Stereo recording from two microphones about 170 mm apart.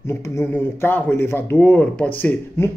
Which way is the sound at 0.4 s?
15° left (ahead or behind).